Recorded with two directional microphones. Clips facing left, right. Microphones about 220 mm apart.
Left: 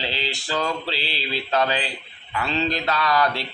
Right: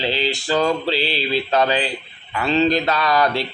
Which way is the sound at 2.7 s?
20° right (ahead or behind).